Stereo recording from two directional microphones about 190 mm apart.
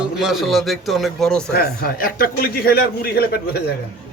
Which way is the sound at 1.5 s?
50° left (ahead or behind).